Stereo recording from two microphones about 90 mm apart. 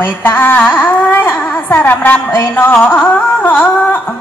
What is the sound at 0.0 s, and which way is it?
Speech, 25° left (ahead or behind).